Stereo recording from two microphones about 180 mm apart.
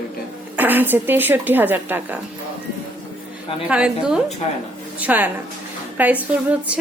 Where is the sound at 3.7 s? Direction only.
5° right (ahead or behind).